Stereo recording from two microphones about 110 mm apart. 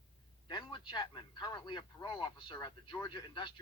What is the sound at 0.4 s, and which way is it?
A man's voice, 40° left (ahead or behind).